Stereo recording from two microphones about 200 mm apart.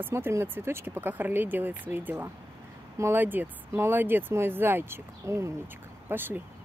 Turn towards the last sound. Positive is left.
turn(degrees=-10)  # may be behind; listen again after turning